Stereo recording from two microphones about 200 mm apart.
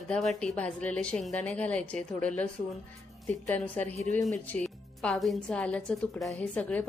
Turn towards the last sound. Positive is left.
turn(degrees=5)  # may be behind; listen again after turning